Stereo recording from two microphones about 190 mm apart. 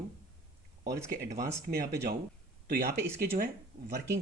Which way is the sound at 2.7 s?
55° right (ahead or behind).